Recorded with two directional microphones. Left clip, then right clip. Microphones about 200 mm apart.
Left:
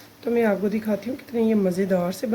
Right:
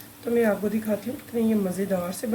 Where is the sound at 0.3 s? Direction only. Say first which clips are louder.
Left 1 dB; 50° left (ahead or behind).